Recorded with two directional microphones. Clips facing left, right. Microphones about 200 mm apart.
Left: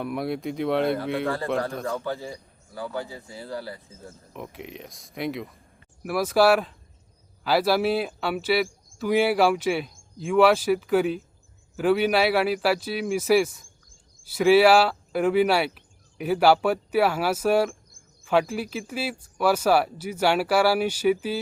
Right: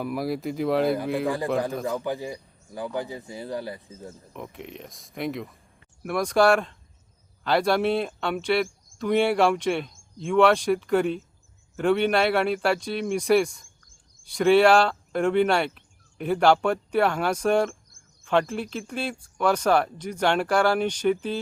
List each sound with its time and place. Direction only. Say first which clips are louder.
0.0 s speech: even; centre (ahead or behind)
2.0 s speech: right 2 dB; 15° right (ahead or behind)
4.4 s speech: left 1 dB; centre (ahead or behind)